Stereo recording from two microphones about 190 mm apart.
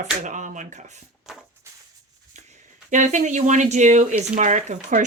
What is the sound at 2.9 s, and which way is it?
Speech, 40° right (ahead or behind).